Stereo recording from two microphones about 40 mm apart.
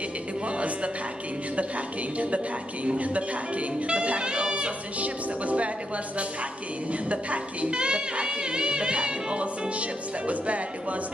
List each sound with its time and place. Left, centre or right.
0.5 s music: right
2.1 s speech: right
6.9 s speech: right